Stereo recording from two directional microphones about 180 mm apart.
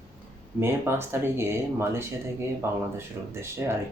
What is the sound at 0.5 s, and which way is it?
Speech, 15° right (ahead or behind).